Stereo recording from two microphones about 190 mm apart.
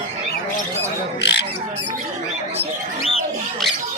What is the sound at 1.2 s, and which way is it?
Bird, 65° left (ahead or behind).